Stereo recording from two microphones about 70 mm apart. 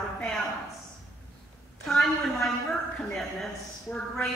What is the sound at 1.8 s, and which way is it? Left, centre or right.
Speech, centre.